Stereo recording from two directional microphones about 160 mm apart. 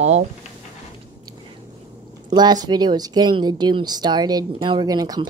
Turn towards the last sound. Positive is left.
turn(degrees=-25)  # may be behind; listen again after turning